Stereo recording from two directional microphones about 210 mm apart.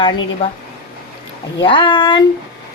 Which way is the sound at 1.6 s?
25° left (ahead or behind).